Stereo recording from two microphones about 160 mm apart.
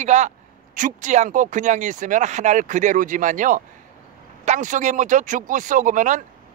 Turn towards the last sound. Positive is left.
turn(degrees=-55)  # may be behind; listen again after turning